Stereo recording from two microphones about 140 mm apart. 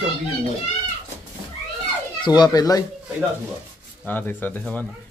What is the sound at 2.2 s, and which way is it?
Speech, 30° left (ahead or behind).